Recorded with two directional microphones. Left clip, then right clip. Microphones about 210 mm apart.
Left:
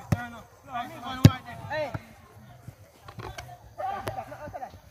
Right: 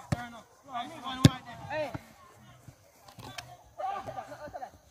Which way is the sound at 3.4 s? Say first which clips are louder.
Left 1 dB; 5° left (ahead or behind).